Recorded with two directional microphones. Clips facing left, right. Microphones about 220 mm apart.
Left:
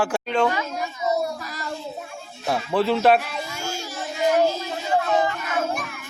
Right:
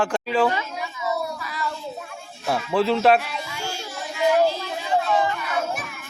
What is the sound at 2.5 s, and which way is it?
Speech, centre (ahead or behind).